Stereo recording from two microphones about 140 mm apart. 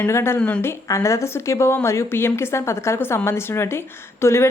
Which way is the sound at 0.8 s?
20° left (ahead or behind).